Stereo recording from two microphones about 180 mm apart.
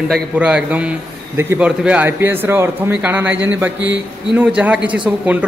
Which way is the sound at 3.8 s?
90° right.